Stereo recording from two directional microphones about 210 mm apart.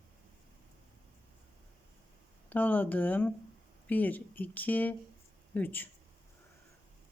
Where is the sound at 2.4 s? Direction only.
10° left (ahead or behind).